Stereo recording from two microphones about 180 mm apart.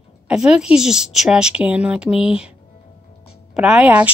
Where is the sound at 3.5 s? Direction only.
5° right (ahead or behind).